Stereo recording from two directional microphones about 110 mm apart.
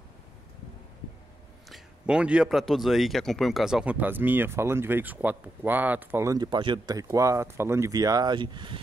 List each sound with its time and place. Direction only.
1.7 s a man's voice: 10° right (ahead or behind)
6.3 s speech: 40° right (ahead or behind)
7.0 s speech: 30° right (ahead or behind); by 8.7 s 45° right (ahead or behind)